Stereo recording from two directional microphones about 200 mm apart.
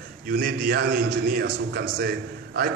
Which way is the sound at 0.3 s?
55° right (ahead or behind).